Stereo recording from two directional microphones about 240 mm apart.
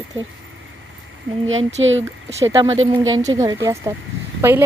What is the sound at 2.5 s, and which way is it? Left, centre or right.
A woman's voice, centre.